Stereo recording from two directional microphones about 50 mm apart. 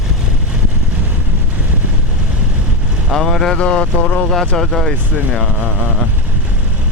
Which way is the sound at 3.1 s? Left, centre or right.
Centre.